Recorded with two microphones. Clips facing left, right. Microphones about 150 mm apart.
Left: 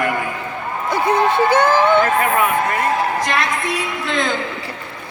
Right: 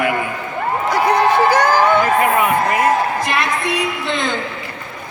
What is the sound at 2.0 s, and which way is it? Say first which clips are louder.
Speech: right 2 dB; 5° right (ahead or behind).